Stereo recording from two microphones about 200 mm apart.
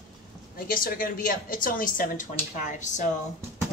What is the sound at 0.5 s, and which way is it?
A woman's voice, 45° left (ahead or behind).